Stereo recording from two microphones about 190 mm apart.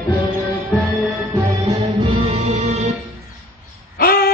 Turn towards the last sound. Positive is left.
turn(degrees=55)  # may be behind; listen again after turning